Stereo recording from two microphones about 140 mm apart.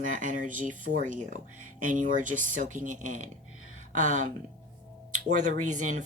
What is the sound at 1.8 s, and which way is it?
Speech, 65° right (ahead or behind).